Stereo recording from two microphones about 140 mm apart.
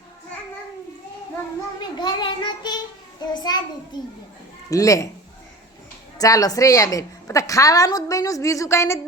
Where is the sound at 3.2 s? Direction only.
30° left (ahead or behind).